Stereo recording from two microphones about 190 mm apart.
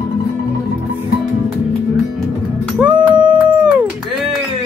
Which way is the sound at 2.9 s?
25° right (ahead or behind).